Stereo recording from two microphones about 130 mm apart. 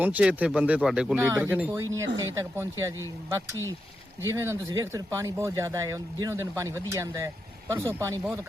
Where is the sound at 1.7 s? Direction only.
25° right (ahead or behind).